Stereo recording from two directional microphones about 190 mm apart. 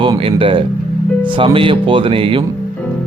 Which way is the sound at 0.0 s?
30° right (ahead or behind).